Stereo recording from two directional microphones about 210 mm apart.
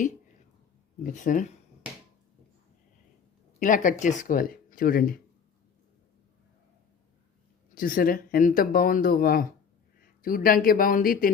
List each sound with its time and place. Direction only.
1.0 s speech: 40° left (ahead or behind)
3.6 s speech: 40° left (ahead or behind)
7.8 s speech: 40° left (ahead or behind)